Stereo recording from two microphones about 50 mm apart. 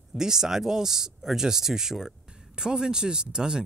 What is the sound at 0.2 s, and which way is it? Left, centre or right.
Speech, centre.